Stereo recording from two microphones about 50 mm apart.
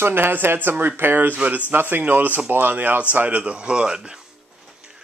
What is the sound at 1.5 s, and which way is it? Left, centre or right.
Speech, right.